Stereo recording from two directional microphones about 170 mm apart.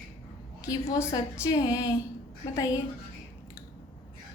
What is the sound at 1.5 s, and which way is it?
Speech, 20° left (ahead or behind).